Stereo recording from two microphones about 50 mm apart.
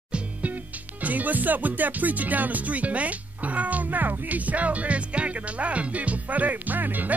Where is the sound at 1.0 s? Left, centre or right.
Right.